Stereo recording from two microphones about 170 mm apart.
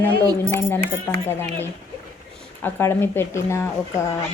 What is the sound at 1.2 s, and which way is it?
Speech, 15° left (ahead or behind).